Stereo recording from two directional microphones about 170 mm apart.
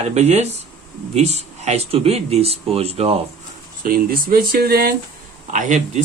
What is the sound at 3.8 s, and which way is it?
Speech, 60° right (ahead or behind).